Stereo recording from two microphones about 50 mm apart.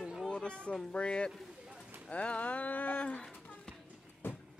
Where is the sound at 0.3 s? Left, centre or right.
Left.